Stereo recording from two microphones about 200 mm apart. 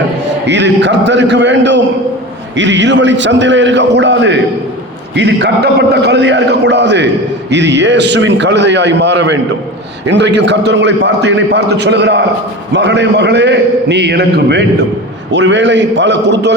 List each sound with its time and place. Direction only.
0.4 s a man's voice: 60° right (ahead or behind)